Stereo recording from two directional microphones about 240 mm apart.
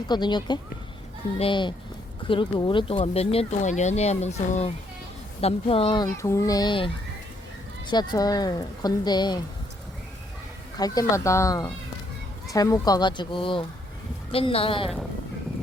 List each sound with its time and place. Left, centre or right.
0.1 s speech: centre
10.8 s speech: centre